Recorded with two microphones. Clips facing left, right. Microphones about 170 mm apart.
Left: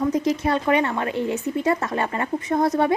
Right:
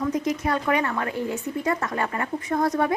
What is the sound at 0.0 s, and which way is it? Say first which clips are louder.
Speech: left 3 dB; 30° left (ahead or behind).